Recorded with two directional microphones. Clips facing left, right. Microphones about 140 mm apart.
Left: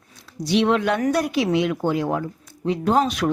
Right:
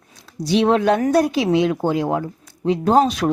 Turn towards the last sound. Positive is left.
turn(degrees=-35)  # may be behind; listen again after turning